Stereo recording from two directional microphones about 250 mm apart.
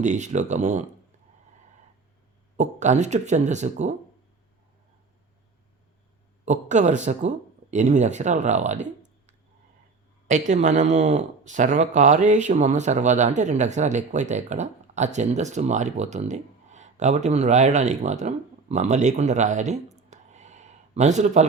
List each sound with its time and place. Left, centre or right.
0.0 s speech: right
2.6 s speech: right
6.4 s speech: right
20.0 s a sound: right